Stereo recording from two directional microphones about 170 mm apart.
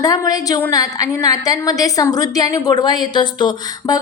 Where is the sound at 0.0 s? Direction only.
20° left (ahead or behind).